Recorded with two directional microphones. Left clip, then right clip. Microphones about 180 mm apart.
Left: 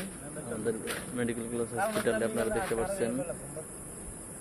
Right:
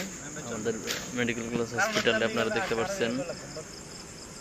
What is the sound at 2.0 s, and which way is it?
Speech, 15° right (ahead or behind).